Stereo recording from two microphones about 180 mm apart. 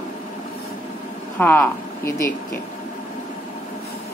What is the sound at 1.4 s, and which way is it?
Speech, 10° left (ahead or behind).